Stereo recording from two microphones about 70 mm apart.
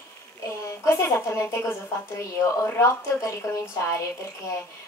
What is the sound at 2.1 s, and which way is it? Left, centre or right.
Speech, left.